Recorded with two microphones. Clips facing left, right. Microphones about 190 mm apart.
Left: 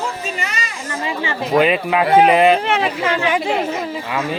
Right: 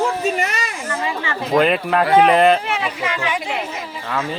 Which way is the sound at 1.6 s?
5° left (ahead or behind).